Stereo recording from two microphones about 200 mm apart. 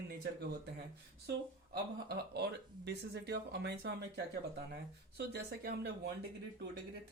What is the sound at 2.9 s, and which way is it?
Speech, 55° right (ahead or behind).